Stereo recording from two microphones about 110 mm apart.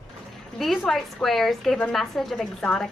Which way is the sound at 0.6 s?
Centre (ahead or behind).